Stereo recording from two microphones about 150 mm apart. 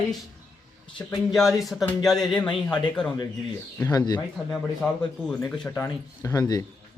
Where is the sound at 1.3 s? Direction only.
Centre (ahead or behind).